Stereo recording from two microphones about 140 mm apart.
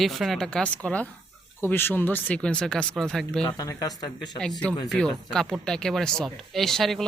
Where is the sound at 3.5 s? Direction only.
25° left (ahead or behind).